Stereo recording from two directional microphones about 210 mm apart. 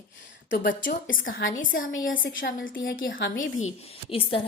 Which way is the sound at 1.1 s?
40° left (ahead or behind).